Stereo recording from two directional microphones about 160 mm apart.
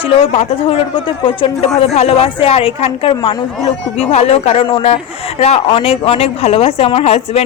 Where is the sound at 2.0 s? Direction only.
40° left (ahead or behind).